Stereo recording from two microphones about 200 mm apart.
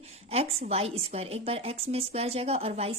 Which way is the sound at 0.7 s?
30° right (ahead or behind).